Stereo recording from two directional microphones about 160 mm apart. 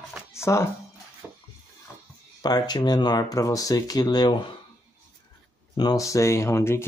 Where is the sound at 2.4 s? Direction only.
25° left (ahead or behind).